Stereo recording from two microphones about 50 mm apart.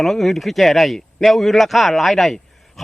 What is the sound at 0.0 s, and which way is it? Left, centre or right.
A man's voice, centre.